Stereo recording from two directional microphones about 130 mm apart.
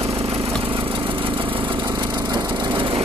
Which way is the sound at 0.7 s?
40° right (ahead or behind).